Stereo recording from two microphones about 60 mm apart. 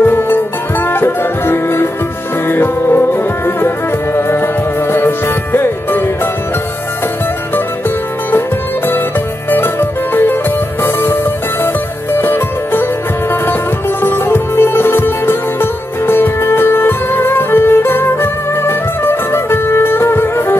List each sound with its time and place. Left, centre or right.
0.0 s music: left
8.3 s music: left